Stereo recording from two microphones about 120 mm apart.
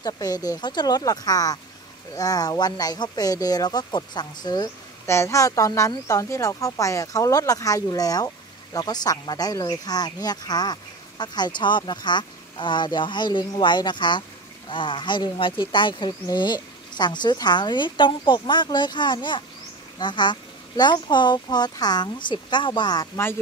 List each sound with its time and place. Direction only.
0.0 s speech: 30° left (ahead or behind)
5.0 s speech: 25° left (ahead or behind)